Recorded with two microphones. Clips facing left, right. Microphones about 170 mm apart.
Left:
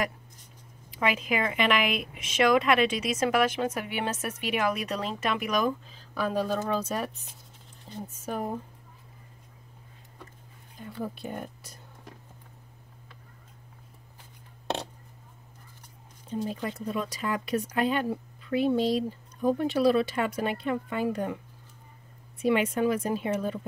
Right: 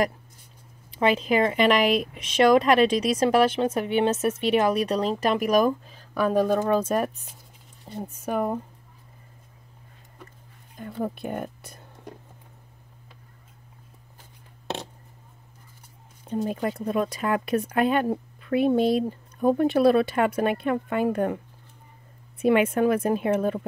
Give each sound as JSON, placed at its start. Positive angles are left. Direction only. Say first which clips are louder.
{"t": 0.9, "sound": "speech", "louder": "right 6 dB", "side_deg": -30}
{"t": 10.8, "sound": "speech", "louder": "right 5 dB", "side_deg": -50}
{"t": 16.3, "sound": "speech", "louder": "right 5 dB", "side_deg": -55}
{"t": 22.4, "sound": "speech", "louder": "right 5 dB", "side_deg": -55}